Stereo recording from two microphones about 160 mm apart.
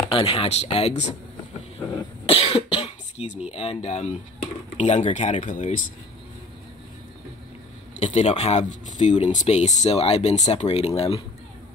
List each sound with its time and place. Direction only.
0.1 s speech: 35° left (ahead or behind); by 5.8 s 55° left (ahead or behind)
8.0 s speech: 45° left (ahead or behind)